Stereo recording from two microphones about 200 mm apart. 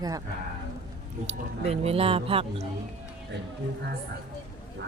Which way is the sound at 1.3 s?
30° right (ahead or behind).